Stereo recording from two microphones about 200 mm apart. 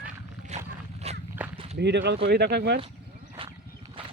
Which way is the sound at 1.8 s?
60° right (ahead or behind).